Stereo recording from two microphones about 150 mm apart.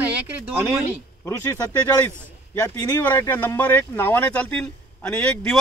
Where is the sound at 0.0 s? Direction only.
10° right (ahead or behind).